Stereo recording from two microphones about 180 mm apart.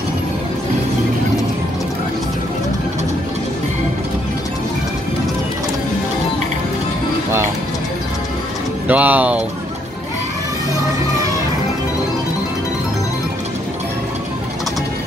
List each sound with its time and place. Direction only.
8.8 s speech: 10° right (ahead or behind)